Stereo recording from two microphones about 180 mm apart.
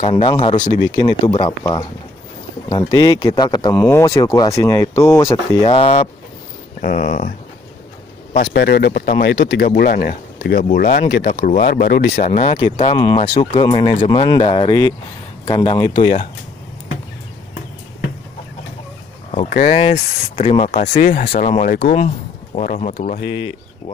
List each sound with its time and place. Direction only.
0.1 s speech: 30° left (ahead or behind)
2.9 s speech: 20° left (ahead or behind)
5.6 s speech: 30° left (ahead or behind)
6.8 s speech: 45° left (ahead or behind)
8.4 s speech: 60° left (ahead or behind)
10.6 s speech: 45° left (ahead or behind)
12.3 s speech: 35° left (ahead or behind)
19.3 s speech: 40° left (ahead or behind)